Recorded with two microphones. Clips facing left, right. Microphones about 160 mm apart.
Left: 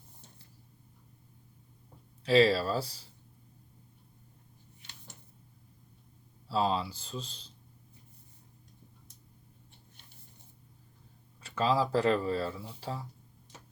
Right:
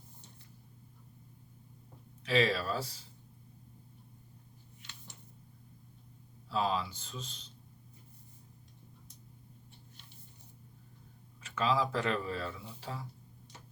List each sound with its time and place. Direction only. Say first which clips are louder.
2.2 s speech: left 6 dB; 35° left (ahead or behind)
6.5 s speech: left 3 dB; 30° left (ahead or behind)
11.3 s speech: left 3 dB; 35° left (ahead or behind)